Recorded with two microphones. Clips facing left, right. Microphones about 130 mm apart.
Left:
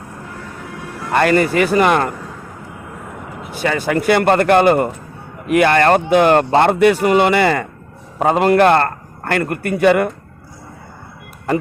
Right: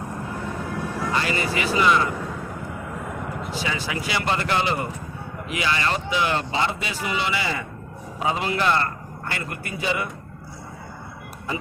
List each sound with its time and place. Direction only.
1.1 s a man's voice: 55° left (ahead or behind)
3.5 s a man's voice: 55° left (ahead or behind)